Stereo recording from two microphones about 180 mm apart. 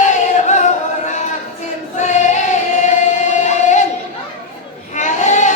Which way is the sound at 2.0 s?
40° left (ahead or behind).